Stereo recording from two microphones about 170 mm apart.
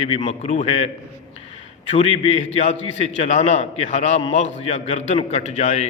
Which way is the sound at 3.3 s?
40° left (ahead or behind).